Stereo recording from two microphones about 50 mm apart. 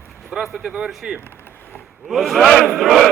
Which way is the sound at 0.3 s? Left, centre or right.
Centre.